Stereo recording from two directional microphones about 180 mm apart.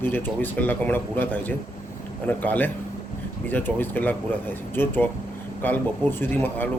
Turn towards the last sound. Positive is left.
turn(degrees=10)  # may be behind; listen again after turning